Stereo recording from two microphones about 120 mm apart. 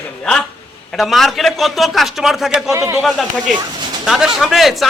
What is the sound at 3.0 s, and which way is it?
A man's voice, centre (ahead or behind).